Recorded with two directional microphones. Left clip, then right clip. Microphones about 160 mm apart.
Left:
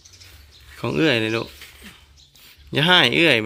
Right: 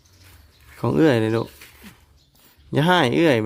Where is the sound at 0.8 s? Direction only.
35° right (ahead or behind).